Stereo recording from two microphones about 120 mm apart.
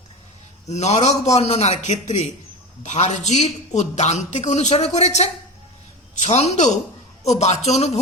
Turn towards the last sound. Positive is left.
turn(degrees=65)  # may be behind; listen again after turning